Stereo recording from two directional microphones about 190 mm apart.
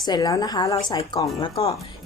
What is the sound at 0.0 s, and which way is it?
A woman's voice, 20° left (ahead or behind).